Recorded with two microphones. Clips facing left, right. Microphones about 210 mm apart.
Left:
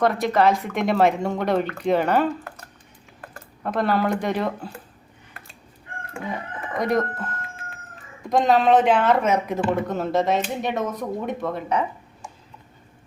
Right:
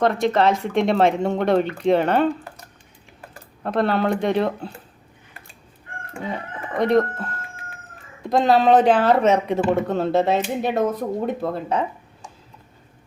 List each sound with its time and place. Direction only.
0.0 s speech: 25° right (ahead or behind)
3.6 s speech: 25° right (ahead or behind)
6.3 s speech: 30° right (ahead or behind)
8.3 s speech: 35° right (ahead or behind)